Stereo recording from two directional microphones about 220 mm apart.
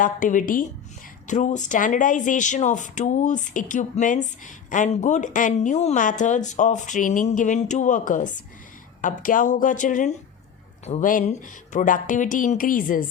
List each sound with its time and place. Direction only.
0.0 s speech: 35° left (ahead or behind)